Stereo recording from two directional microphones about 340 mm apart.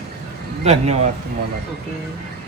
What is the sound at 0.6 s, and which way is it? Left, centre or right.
Speech, centre.